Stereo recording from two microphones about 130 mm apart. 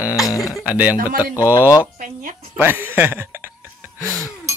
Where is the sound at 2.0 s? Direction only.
90° right.